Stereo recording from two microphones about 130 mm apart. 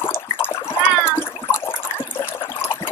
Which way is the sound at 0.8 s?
20° left (ahead or behind).